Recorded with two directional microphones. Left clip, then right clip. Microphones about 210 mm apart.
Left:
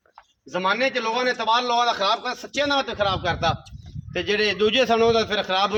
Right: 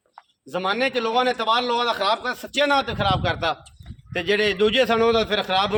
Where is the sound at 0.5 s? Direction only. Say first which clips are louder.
Left 1 dB; 55° right (ahead or behind).